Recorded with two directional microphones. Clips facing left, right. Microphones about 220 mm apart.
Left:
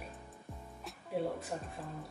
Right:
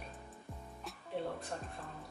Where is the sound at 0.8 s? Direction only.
5° left (ahead or behind).